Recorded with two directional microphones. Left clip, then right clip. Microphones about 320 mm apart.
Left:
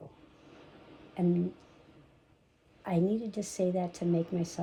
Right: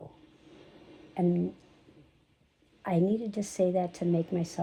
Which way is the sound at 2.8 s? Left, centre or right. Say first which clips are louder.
Right 2 dB; right.